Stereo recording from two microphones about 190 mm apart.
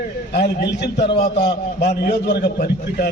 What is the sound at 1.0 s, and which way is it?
Speech, 25° left (ahead or behind).